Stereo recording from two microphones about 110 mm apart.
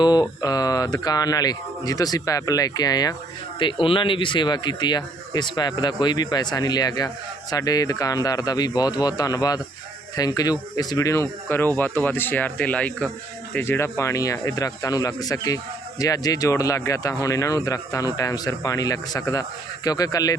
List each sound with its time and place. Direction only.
0.0 s speech: 40° left (ahead or behind)
3.6 s speech: 50° left (ahead or behind); by 11.3 s 30° left (ahead or behind)
11.4 s speech: 20° left (ahead or behind); by 20.3 s 35° left (ahead or behind)